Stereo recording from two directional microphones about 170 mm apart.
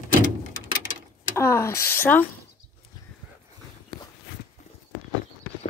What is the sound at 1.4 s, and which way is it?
Speech, 15° left (ahead or behind).